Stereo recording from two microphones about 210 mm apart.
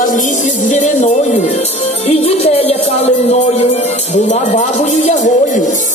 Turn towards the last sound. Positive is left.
turn(degrees=35)  # may be behind; listen again after turning